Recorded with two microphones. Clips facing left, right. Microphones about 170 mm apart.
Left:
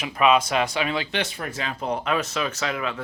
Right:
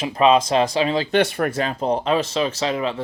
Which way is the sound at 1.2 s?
60° right (ahead or behind).